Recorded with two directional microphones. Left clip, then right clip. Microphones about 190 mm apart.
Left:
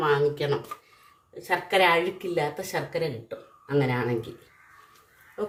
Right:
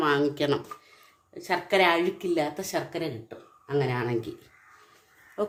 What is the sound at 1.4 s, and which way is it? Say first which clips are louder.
A woman's voice: left 1 dB; 45° right (ahead or behind).